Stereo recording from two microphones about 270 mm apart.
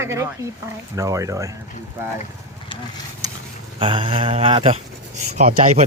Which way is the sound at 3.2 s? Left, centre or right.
Centre.